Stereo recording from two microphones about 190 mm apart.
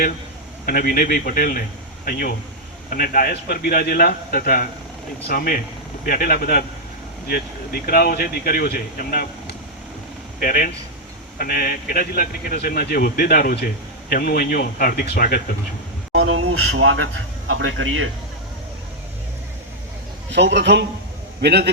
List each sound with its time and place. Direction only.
0.6 s speech: 50° left (ahead or behind)
16.1 s speech: 90° right
20.3 s a man's voice: 65° right (ahead or behind)